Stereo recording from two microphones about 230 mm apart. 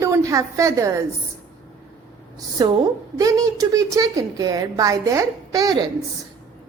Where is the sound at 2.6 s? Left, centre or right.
Centre.